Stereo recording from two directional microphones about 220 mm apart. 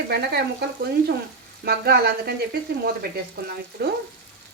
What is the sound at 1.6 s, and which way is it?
Speech, 45° right (ahead or behind).